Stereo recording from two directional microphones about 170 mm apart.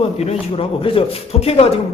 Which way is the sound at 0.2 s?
35° left (ahead or behind).